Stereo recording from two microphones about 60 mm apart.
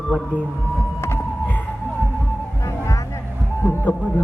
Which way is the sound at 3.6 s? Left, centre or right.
Left.